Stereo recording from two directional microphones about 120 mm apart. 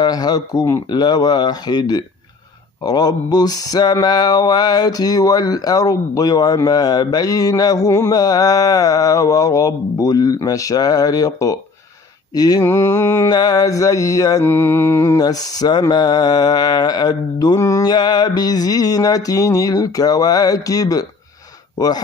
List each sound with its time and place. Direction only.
0.0 s mantra: 35° left (ahead or behind)
12.6 s mantra: 20° left (ahead or behind)
13.3 s mantra: 35° left (ahead or behind)
14.4 s mantra: 20° left (ahead or behind)
17.9 s mantra: 35° left (ahead or behind)
21.7 s speech: 35° left (ahead or behind)